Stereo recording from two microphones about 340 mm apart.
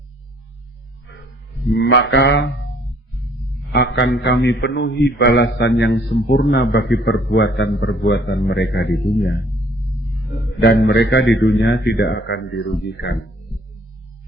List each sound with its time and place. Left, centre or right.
1.7 s a man's voice: left
3.7 s a man's voice: left
10.6 s a man's voice: left